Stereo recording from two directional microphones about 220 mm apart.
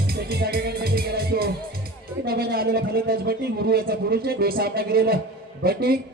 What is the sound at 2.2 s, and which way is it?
Speech, 45° right (ahead or behind).